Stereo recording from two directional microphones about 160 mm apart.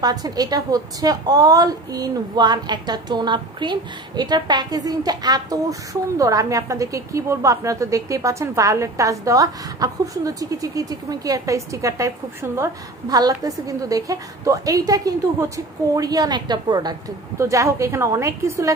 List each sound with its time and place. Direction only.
0.0 s a woman's voice: 25° right (ahead or behind)